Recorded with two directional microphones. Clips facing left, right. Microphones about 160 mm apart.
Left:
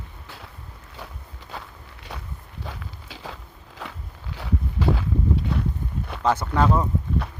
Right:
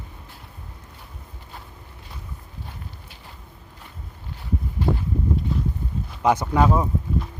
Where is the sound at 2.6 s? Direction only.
90° left.